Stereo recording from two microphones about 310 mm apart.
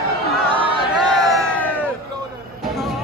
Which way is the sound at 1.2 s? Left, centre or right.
Centre.